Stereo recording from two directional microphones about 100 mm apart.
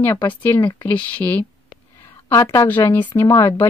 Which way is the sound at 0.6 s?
50° left (ahead or behind).